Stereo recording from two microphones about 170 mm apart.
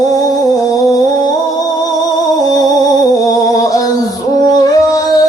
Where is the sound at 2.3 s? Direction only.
20° left (ahead or behind).